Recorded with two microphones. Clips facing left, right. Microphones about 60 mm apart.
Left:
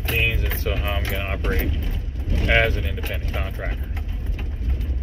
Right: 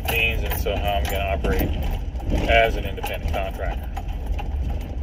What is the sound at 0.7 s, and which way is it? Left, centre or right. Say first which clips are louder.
Speech: right 4 dB; left.